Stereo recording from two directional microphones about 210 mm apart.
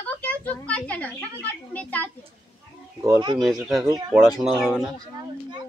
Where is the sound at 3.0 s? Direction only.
15° right (ahead or behind).